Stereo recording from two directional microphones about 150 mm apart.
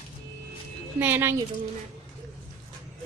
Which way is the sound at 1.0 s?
15° right (ahead or behind).